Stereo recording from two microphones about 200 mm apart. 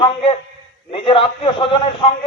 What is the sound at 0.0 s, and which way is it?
A man's voice, 25° left (ahead or behind).